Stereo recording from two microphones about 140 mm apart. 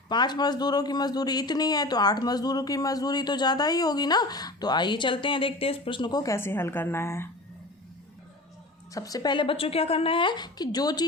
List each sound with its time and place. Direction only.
0.1 s speech: 30° left (ahead or behind)
8.9 s a woman's voice: 25° left (ahead or behind)